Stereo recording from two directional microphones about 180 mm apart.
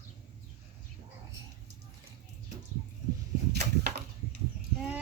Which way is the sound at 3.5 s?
65° right (ahead or behind).